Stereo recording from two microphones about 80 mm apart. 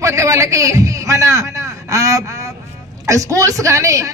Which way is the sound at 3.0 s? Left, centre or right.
Right.